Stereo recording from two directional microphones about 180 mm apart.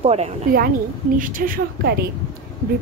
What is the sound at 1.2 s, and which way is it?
Speech, 50° right (ahead or behind).